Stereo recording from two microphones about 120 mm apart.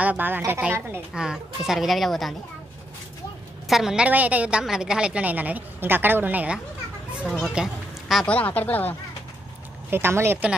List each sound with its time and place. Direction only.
0.0 s a woman's voice: 15° right (ahead or behind)
3.6 s a woman's voice: 5° right (ahead or behind)
7.1 s children playing: 10° right (ahead or behind)
7.3 s speech: 5° right (ahead or behind)
8.3 s speech: 15° left (ahead or behind)
9.8 s speech: 20° right (ahead or behind)